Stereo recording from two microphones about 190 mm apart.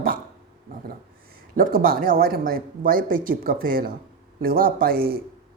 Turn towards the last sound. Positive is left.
turn(degrees=-50)  # may be behind; listen again after turning